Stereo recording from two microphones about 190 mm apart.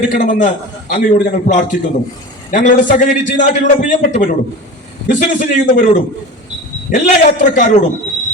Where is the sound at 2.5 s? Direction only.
45° left (ahead or behind).